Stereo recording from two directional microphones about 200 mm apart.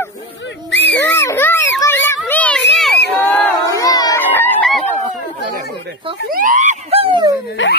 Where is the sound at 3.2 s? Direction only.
10° left (ahead or behind).